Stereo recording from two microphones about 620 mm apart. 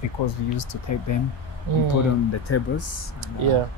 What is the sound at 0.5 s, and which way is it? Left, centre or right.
Speech, left.